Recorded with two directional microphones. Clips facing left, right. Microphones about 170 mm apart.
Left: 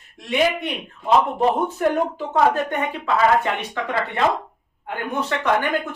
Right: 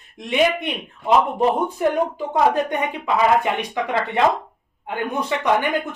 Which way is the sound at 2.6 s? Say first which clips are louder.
Right 1 dB; 15° right (ahead or behind).